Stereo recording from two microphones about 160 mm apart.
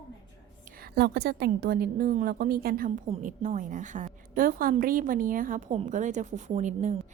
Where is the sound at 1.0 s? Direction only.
90° right; by 2.9 s 65° right (ahead or behind).